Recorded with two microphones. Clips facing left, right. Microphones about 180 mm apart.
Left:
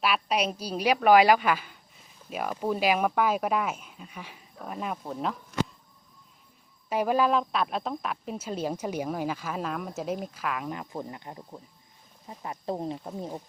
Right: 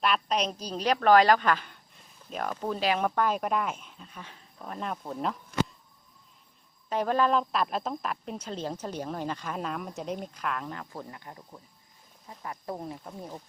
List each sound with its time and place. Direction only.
0.0 s a woman's voice: 5° left (ahead or behind)
6.9 s speech: 10° left (ahead or behind)
10.7 s speech: 15° left (ahead or behind)